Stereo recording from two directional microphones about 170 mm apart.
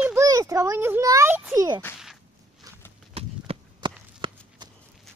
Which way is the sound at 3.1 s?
35° right (ahead or behind).